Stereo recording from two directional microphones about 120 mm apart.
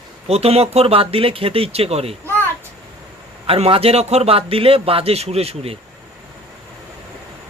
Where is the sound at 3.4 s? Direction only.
50° right (ahead or behind).